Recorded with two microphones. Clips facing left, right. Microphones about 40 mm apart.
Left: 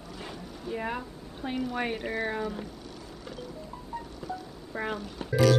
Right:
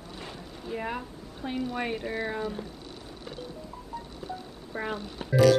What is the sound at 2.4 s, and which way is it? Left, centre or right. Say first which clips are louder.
Vehicle: even; left.